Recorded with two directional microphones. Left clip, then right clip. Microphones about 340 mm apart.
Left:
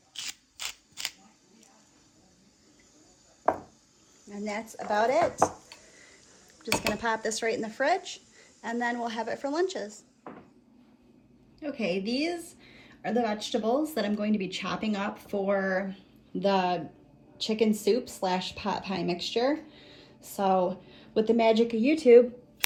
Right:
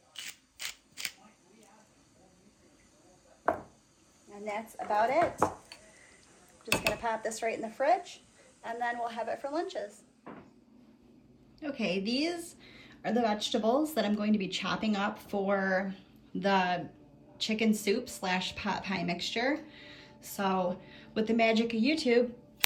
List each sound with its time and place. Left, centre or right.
4.3 s a woman's voice: left
6.8 s speech: left
11.6 s a woman's voice: centre